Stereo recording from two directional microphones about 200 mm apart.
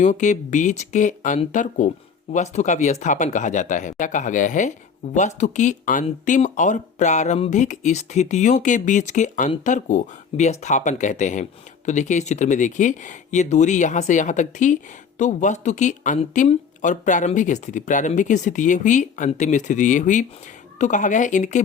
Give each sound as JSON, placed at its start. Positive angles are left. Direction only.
{"t": 0.0, "sound": "speech", "side_deg": 40}